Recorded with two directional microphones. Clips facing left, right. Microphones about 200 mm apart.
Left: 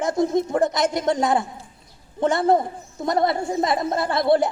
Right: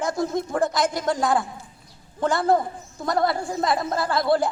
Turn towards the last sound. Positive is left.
turn(degrees=25)  # may be behind; listen again after turning